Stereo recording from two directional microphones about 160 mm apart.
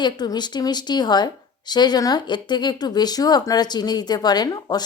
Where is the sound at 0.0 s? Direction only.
25° left (ahead or behind).